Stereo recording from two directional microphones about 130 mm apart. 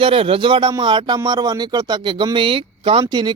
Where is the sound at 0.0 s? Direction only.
45° right (ahead or behind).